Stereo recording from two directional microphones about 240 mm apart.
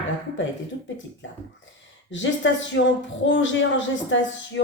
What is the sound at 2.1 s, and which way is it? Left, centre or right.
Speech, left.